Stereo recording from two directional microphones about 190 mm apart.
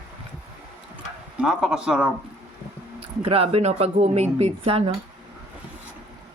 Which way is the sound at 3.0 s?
30° right (ahead or behind).